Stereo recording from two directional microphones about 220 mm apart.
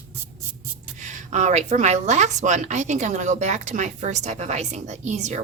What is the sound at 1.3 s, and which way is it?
Speech, 35° right (ahead or behind).